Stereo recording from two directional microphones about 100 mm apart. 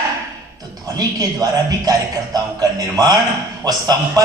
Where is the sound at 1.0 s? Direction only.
40° right (ahead or behind).